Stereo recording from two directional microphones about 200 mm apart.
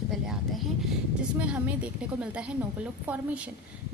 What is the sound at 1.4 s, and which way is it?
A woman's voice, 5° right (ahead or behind).